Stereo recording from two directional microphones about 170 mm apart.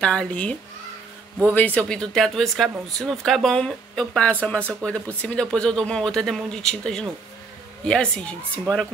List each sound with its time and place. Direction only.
0.0 s a woman's voice: 5° left (ahead or behind)